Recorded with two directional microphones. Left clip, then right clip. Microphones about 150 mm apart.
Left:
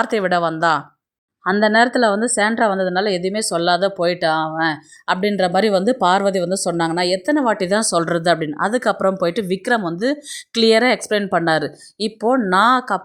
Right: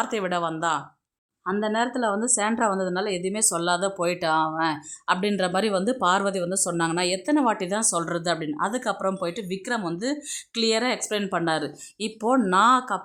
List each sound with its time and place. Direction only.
0.0 s a woman's voice: 25° left (ahead or behind)